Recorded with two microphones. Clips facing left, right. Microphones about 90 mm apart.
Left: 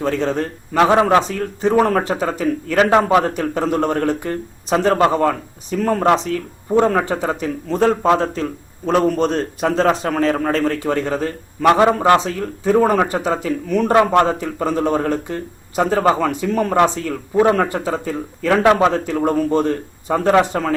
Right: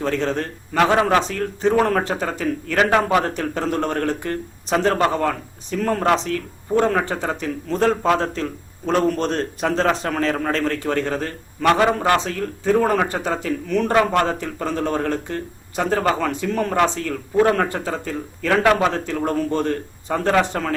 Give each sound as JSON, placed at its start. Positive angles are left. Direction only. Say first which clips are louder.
{"t": 0.0, "sound": "a man's voice", "louder": "left 3 dB", "side_deg": 5}
{"t": 0.8, "sound": "a man's voice", "louder": "left 3 dB", "side_deg": 25}
{"t": 1.2, "sound": "a man's voice", "louder": "left 1 dB", "side_deg": 5}
{"t": 4.9, "sound": "a man's voice", "louder": "left 4 dB", "side_deg": 25}
{"t": 5.2, "sound": "a man's voice", "louder": "left 4 dB", "side_deg": 10}
{"t": 13.9, "sound": "a man's voice", "louder": "left 5 dB", "side_deg": 20}
{"t": 14.3, "sound": "a man's voice", "louder": "left 4 dB", "side_deg": 10}
{"t": 18.5, "sound": "a man's voice", "louder": "left 3 dB", "side_deg": 20}